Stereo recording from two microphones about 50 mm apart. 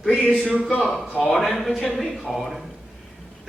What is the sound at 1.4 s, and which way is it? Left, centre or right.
Speech, centre.